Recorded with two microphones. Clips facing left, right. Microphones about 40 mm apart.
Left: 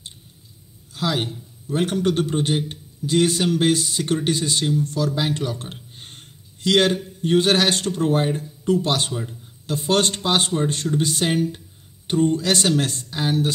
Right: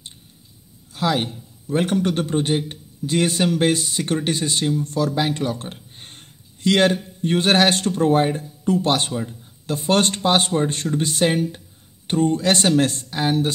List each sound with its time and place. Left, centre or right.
0.9 s speech: right
5.5 s a sound: right
6.6 s speech: right
12.1 s speech: right